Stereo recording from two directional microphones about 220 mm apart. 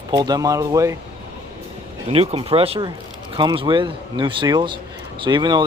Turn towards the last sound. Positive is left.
turn(degrees=-20)  # may be behind; listen again after turning